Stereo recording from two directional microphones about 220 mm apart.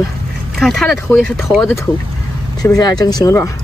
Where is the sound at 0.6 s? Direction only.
Centre (ahead or behind).